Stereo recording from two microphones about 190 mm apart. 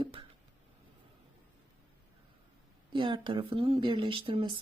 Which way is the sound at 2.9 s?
25° right (ahead or behind).